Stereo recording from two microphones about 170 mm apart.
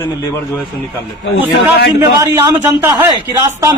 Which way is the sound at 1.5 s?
90° left.